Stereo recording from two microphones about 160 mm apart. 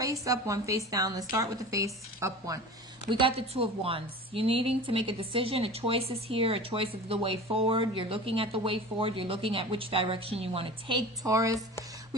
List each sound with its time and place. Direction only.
0.0 s a woman's voice: 20° right (ahead or behind)
3.1 s a woman's voice: 35° right (ahead or behind)
11.3 s a woman's voice: 20° right (ahead or behind)